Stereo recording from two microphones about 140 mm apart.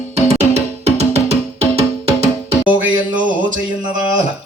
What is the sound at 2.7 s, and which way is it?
Music, 10° right (ahead or behind).